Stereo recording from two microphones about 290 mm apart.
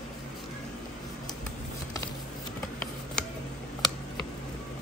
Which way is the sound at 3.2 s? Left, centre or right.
Centre.